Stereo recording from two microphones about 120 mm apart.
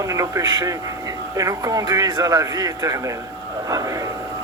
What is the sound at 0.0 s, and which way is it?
Speech, 25° right (ahead or behind).